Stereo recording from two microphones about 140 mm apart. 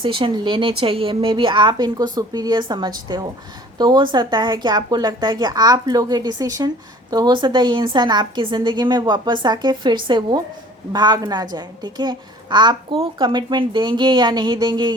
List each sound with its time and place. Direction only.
0.0 s a child's voice: 35° right (ahead or behind)